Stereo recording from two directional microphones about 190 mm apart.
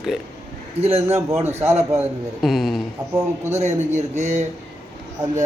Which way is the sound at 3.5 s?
35° right (ahead or behind).